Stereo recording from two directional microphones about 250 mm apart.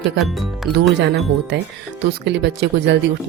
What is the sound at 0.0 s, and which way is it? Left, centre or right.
Speech, centre.